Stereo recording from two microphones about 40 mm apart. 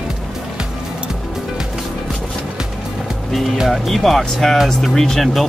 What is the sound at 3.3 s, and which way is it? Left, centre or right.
Speech, centre.